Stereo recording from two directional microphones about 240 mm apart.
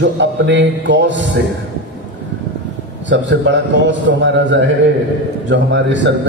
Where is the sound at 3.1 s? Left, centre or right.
Right.